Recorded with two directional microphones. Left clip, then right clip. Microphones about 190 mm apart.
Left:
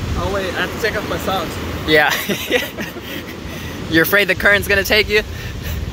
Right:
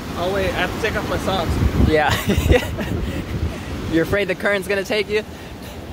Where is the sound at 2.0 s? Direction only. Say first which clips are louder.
Left 1 dB; 20° right (ahead or behind).